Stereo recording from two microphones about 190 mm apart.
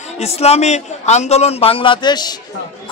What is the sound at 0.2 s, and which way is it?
Speech, 35° left (ahead or behind).